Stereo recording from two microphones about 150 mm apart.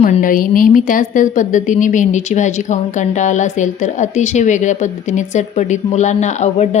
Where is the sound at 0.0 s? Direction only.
60° left (ahead or behind).